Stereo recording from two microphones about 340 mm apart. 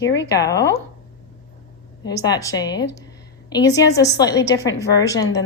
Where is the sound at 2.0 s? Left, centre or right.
Centre.